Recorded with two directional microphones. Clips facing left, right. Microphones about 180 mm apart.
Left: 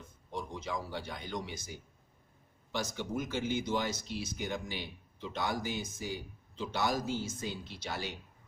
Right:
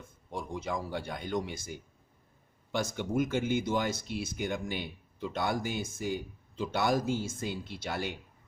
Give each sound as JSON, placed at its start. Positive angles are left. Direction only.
{"t": 0.3, "sound": "speech", "side_deg": -50}